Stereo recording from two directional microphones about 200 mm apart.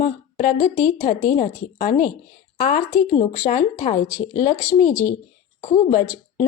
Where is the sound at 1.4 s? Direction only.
30° left (ahead or behind).